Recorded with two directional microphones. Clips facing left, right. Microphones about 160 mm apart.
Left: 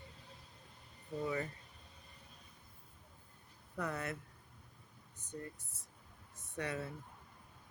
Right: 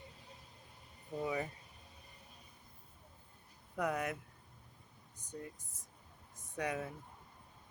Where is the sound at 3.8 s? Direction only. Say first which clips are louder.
Right 4 dB; 10° right (ahead or behind).